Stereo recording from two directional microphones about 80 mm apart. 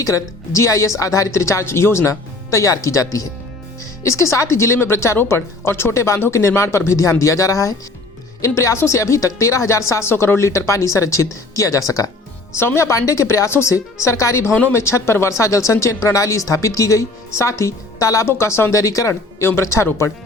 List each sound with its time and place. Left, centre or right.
0.0 s a woman's voice: left